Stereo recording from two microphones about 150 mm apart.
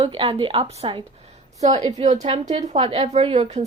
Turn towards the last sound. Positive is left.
turn(degrees=-45)  # may be behind; listen again after turning